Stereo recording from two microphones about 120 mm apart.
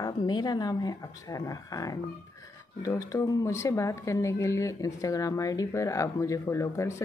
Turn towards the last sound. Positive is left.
turn(degrees=25)  # may be behind; listen again after turning